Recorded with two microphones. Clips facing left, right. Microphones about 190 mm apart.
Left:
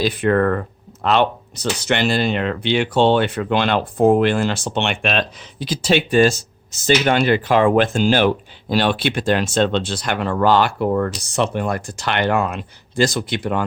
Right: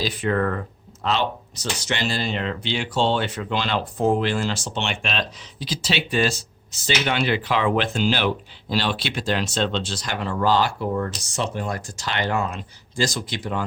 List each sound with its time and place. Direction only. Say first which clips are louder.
0.0 s speech: left 6 dB; 55° left (ahead or behind)